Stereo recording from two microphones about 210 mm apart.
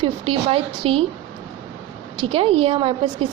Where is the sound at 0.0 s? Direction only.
25° right (ahead or behind).